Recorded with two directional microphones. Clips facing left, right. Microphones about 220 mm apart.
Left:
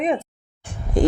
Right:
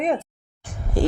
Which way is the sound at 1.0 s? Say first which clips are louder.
Left 3 dB; 20° left (ahead or behind).